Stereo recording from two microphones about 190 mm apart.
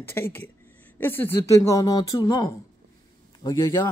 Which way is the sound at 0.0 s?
10° left (ahead or behind).